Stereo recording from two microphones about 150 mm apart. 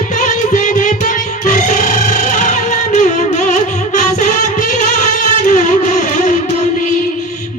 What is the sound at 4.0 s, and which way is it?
Music, 55° left (ahead or behind).